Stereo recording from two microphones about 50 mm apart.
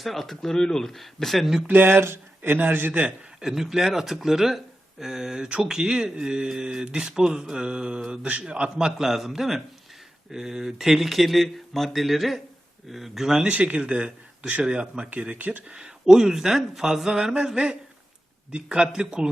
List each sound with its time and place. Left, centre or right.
0.0 s speech: centre
1.6 s speech: right
3.4 s speech: centre
9.0 s speech: centre
13.5 s speech: right
15.1 s speech: right
15.7 s speech: centre